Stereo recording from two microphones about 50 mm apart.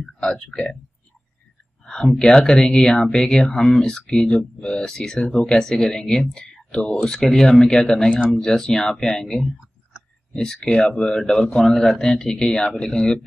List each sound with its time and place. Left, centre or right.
0.2 s speech: centre
1.9 s speech: centre